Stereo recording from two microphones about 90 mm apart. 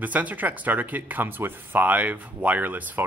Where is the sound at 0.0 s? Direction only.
15° right (ahead or behind).